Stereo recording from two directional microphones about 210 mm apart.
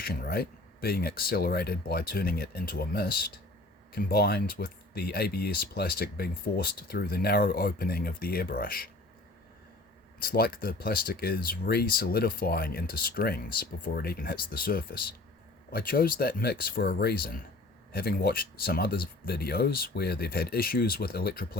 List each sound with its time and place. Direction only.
0.0 s speech: 45° left (ahead or behind)
10.2 s speech: 45° left (ahead or behind)